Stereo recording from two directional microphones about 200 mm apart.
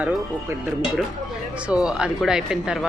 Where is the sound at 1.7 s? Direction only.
5° right (ahead or behind).